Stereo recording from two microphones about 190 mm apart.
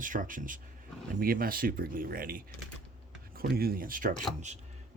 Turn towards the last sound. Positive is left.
turn(degrees=-45)  # may be behind; listen again after turning